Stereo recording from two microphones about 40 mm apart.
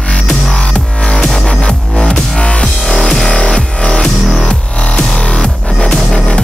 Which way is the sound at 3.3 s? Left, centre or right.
Left.